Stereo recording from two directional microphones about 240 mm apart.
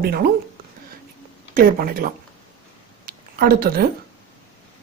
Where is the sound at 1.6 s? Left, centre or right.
Right.